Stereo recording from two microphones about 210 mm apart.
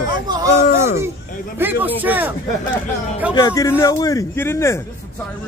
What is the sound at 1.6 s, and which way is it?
Speech, 10° right (ahead or behind).